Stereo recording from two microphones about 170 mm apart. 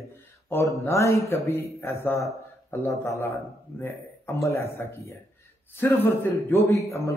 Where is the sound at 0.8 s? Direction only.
15° left (ahead or behind).